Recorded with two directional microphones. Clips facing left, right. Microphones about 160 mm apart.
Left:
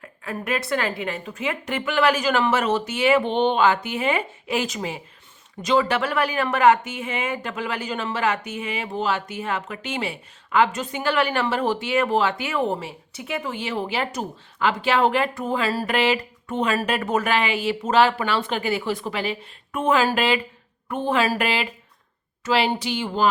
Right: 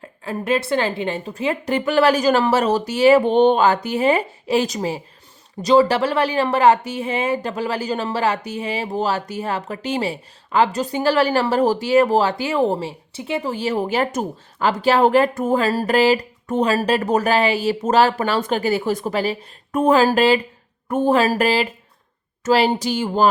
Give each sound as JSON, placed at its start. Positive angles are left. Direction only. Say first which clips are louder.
{"t": 0.0, "sound": "speech", "louder": "right 4 dB", "side_deg": -30}